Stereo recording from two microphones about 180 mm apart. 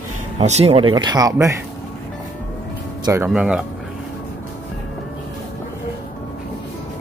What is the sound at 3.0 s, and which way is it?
Speech, 15° right (ahead or behind).